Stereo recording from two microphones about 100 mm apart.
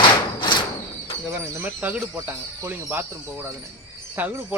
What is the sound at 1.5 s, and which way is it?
A man's voice, 15° right (ahead or behind).